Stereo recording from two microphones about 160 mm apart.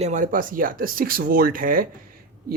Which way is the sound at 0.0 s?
50° right (ahead or behind).